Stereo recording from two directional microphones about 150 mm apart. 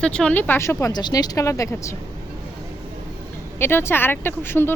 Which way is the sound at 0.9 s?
30° left (ahead or behind).